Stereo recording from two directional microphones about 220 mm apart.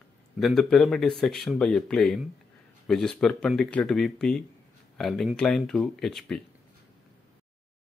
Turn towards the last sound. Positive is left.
turn(degrees=0)  # may be behind; listen again after turning